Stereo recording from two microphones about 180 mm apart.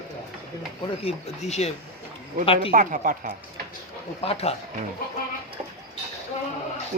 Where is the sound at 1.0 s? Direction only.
40° left (ahead or behind).